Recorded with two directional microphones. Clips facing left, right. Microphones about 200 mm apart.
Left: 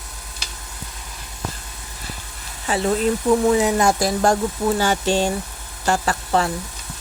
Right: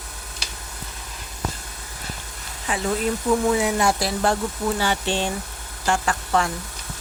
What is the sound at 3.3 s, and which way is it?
A woman's voice, 40° left (ahead or behind).